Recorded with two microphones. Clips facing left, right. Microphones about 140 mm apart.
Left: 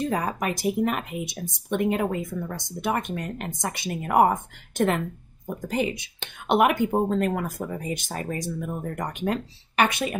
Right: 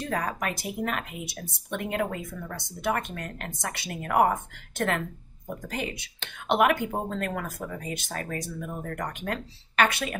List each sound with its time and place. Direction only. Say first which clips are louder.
0.1 s speech: left 3 dB; 20° left (ahead or behind)